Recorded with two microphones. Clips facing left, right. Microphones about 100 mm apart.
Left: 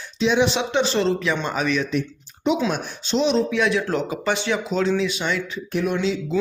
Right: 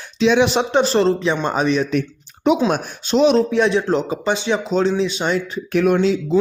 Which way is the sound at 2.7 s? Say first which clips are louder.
Right 5 dB; 50° right (ahead or behind).